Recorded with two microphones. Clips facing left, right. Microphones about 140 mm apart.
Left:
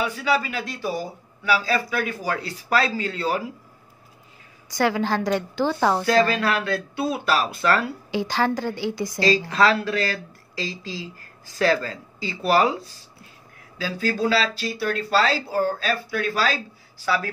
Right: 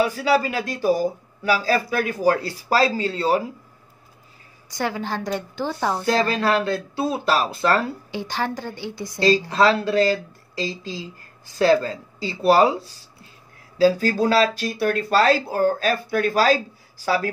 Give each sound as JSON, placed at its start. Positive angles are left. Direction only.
{"t": 0.0, "sound": "speech", "side_deg": -40}
{"t": 4.6, "sound": "a woman's voice", "side_deg": 90}
{"t": 6.0, "sound": "speech", "side_deg": -30}
{"t": 8.1, "sound": "a woman's voice", "side_deg": 90}
{"t": 9.5, "sound": "speech", "side_deg": -30}
{"t": 13.7, "sound": "speech", "side_deg": -40}